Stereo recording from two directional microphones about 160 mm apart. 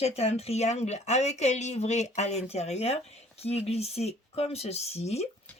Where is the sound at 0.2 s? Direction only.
40° left (ahead or behind).